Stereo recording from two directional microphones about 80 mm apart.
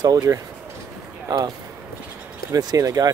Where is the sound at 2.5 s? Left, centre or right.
Right.